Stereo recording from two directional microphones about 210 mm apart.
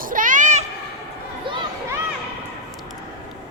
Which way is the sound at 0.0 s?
40° right (ahead or behind).